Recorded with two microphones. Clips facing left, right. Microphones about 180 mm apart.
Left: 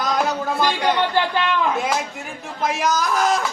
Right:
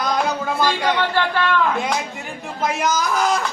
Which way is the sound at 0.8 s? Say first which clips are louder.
Even; 15° left (ahead or behind).